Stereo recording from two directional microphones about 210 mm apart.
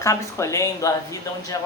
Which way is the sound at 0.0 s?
15° left (ahead or behind).